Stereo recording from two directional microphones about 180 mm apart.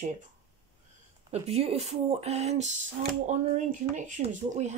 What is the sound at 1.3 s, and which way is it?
Speech, 35° right (ahead or behind).